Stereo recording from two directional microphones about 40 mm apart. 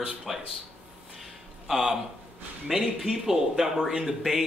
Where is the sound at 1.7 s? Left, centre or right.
Centre.